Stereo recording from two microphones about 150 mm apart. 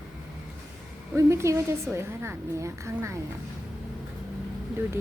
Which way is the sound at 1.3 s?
20° right (ahead or behind).